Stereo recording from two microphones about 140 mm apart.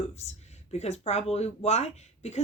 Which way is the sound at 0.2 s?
50° left (ahead or behind).